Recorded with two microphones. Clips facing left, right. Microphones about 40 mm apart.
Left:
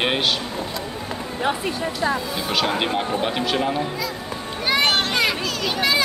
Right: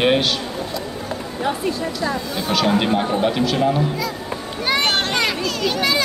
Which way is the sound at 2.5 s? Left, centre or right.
Centre.